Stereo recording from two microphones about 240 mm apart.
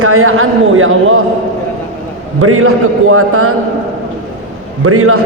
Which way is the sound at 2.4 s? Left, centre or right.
Right.